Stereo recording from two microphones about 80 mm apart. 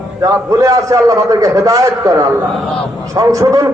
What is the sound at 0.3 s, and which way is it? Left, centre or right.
A man's voice, right.